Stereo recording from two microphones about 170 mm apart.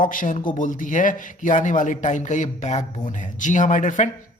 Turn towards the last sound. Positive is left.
turn(degrees=45)  # may be behind; listen again after turning